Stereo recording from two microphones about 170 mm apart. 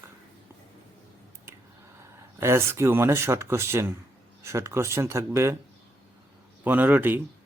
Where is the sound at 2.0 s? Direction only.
15° right (ahead or behind).